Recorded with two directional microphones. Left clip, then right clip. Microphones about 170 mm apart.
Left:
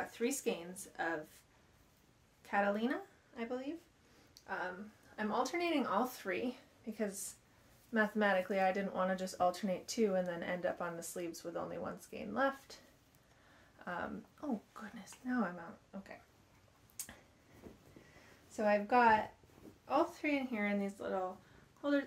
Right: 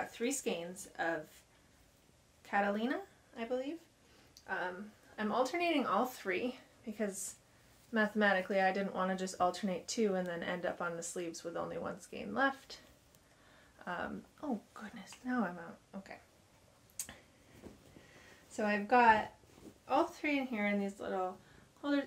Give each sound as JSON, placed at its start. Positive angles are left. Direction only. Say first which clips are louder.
{"t": 0.1, "sound": "speech", "louder": "even", "side_deg": -25}
{"t": 2.4, "sound": "speech", "louder": "right 1 dB", "side_deg": -25}
{"t": 5.1, "sound": "speech", "louder": "right 2 dB", "side_deg": -25}
{"t": 13.8, "sound": "speech", "louder": "right 1 dB", "side_deg": -25}
{"t": 17.0, "sound": "tick-tock", "louder": "right 3 dB", "side_deg": -30}
{"t": 17.6, "sound": "a sound", "louder": "right 1 dB", "side_deg": -35}
{"t": 18.6, "sound": "speech", "louder": "right 1 dB", "side_deg": -30}